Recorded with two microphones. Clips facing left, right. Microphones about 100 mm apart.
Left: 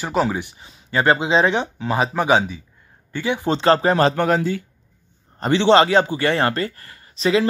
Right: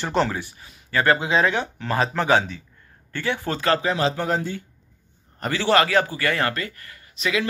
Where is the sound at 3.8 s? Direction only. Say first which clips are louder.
Left 6 dB; 50° left (ahead or behind); by 4.6 s 90° left.